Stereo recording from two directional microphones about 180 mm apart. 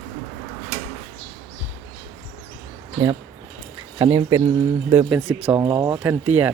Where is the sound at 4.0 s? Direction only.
30° right (ahead or behind).